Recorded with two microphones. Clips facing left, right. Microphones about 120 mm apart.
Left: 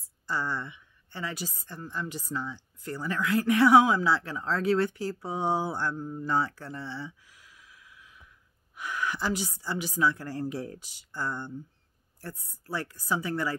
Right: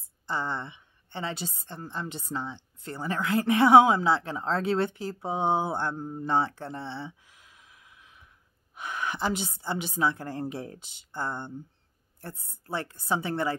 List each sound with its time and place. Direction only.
0.3 s a woman's voice: 20° right (ahead or behind)
6.0 s a sound: 25° right (ahead or behind)
8.7 s a woman's voice: 25° right (ahead or behind)